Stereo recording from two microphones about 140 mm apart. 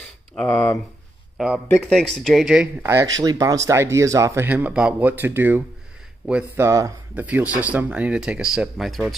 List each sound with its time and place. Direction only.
0.4 s speech: 5° left (ahead or behind)
1.4 s speech: 5° right (ahead or behind)
2.8 s speech: 20° right (ahead or behind)
6.6 s speech: 20° right (ahead or behind)
7.2 s speech: 10° right (ahead or behind)